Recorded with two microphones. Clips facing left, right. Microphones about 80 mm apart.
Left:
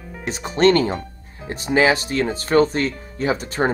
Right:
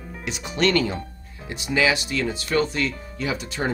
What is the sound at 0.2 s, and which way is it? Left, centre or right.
Speech, left.